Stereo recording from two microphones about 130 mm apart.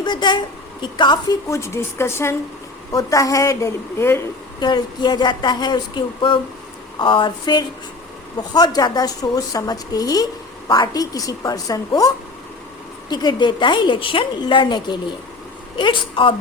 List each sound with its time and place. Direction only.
0.0 s a woman's voice: 35° left (ahead or behind)
1.5 s a woman's voice: 20° left (ahead or behind)
4.6 s a woman's voice: 35° left (ahead or behind)